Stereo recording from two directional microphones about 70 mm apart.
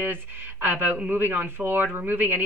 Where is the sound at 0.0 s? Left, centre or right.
Right.